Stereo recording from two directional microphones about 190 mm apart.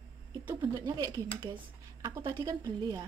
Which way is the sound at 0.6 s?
20° right (ahead or behind).